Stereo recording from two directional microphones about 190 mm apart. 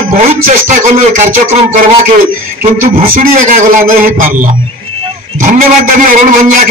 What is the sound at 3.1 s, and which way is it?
Speech, 50° right (ahead or behind).